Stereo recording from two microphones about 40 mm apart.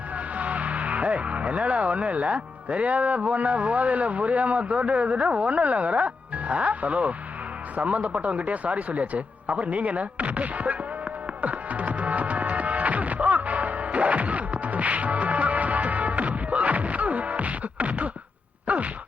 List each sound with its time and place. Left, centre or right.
0.3 s speech: right
11.3 s music: right
18.7 s a sound: right